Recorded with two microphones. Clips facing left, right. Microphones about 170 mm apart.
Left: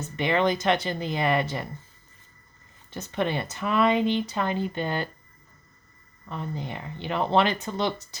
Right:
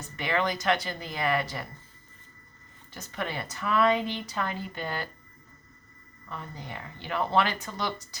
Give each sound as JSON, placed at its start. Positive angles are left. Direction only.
{"t": 0.0, "sound": "speech", "side_deg": 25}
{"t": 2.9, "sound": "speech", "side_deg": 25}
{"t": 6.2, "sound": "speech", "side_deg": 25}